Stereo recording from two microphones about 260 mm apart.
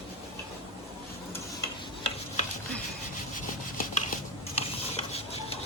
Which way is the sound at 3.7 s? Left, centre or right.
Left.